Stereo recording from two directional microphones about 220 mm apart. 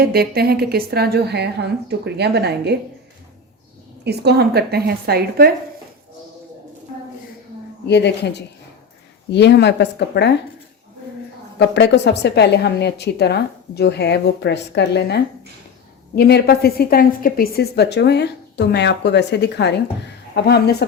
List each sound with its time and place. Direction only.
0.0 s a woman's voice: 45° right (ahead or behind)
4.0 s a woman's voice: 50° right (ahead or behind)
7.9 s a woman's voice: 50° left (ahead or behind)
11.7 s a woman's voice: 50° left (ahead or behind)